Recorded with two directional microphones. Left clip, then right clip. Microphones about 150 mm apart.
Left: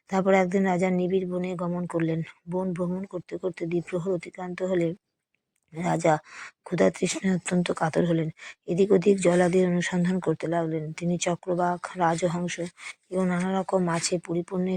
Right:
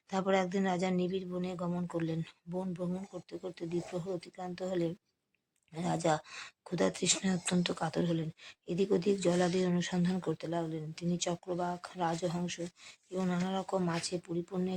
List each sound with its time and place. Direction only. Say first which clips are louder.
0.1 s speech: left 9 dB; 35° left (ahead or behind)